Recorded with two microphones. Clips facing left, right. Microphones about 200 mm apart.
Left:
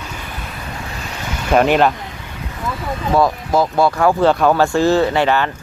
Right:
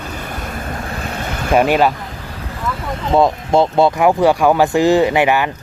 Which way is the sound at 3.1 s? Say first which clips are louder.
Right 2 dB; 25° right (ahead or behind).